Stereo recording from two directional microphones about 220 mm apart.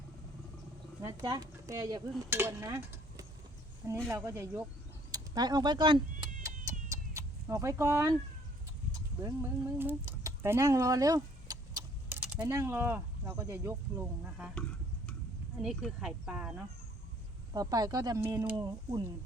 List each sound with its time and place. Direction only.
1.0 s stir: 15° right (ahead or behind)
5.1 s speech: 15° right (ahead or behind)
6.9 s vehicle: 15° right (ahead or behind)
9.2 s a sound: 10° right (ahead or behind)
12.4 s stir: 15° right (ahead or behind)
15.6 s speech: centre (ahead or behind)
17.5 s stir: 15° right (ahead or behind)